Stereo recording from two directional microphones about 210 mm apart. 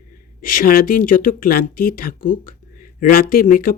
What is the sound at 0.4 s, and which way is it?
Speech, 40° left (ahead or behind).